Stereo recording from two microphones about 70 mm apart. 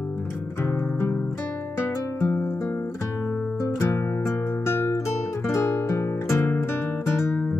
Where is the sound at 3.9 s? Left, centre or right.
Left.